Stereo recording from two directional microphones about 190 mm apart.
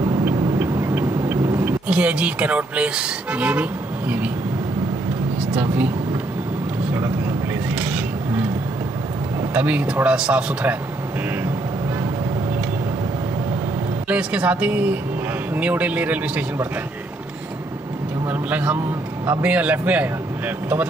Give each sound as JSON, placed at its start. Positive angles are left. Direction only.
{"t": 0.0, "sound": "vehicle", "side_deg": -20}
{"t": 5.5, "sound": "speech", "side_deg": -10}
{"t": 7.7, "sound": "a sound", "side_deg": -10}
{"t": 9.5, "sound": "speech", "side_deg": -10}
{"t": 14.0, "sound": "speech", "side_deg": -5}
{"t": 18.2, "sound": "a sound", "side_deg": -10}
{"t": 19.2, "sound": "speech", "side_deg": -10}